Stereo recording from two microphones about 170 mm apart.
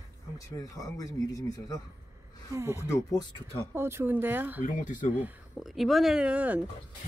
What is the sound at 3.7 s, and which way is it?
Speech, 15° right (ahead or behind).